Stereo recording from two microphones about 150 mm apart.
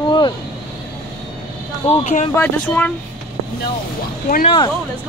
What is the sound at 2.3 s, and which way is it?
Speech, 10° left (ahead or behind).